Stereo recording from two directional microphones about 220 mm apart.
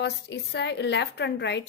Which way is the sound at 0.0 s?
50° left (ahead or behind).